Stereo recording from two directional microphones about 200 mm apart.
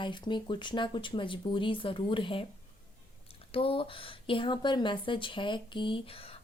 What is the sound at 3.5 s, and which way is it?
Speech, 25° left (ahead or behind).